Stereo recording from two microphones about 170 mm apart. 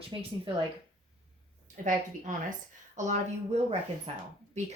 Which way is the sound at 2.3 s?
50° right (ahead or behind).